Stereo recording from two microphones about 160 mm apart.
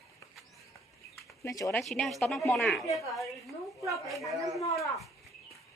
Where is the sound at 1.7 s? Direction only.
5° left (ahead or behind).